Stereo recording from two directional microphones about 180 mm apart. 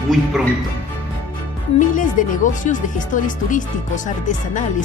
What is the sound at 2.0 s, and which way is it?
Speech, 45° left (ahead or behind).